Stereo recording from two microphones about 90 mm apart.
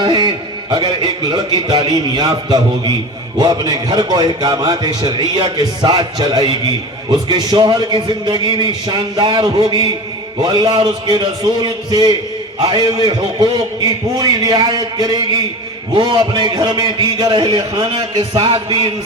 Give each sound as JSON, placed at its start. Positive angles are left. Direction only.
{"t": 0.0, "sound": "a man's voice", "side_deg": -60}